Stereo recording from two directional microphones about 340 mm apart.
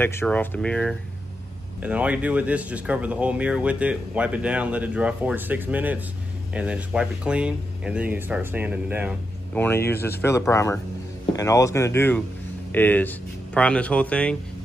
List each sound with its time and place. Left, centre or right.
0.0 s speech: centre